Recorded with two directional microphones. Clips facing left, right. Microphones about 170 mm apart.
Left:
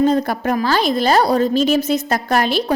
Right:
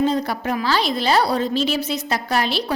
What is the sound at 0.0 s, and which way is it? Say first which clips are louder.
A woman's voice: left 4 dB; 50° left (ahead or behind).